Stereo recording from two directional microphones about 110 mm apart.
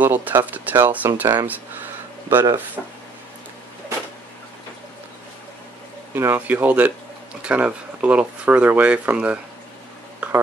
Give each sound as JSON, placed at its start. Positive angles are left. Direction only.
{"t": 0.0, "sound": "speech", "side_deg": -15}
{"t": 6.1, "sound": "speech", "side_deg": -20}
{"t": 10.2, "sound": "a sound", "side_deg": -10}